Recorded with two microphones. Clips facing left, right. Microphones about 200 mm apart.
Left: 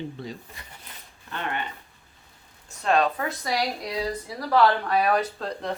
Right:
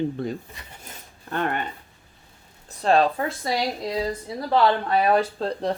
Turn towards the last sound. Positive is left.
turn(degrees=-30)  # may be behind; listen again after turning